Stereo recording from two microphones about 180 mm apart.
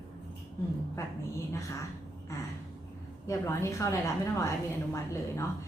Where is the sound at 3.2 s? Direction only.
15° left (ahead or behind).